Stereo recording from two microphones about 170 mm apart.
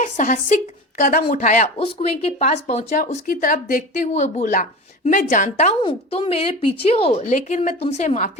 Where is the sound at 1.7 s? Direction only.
35° left (ahead or behind).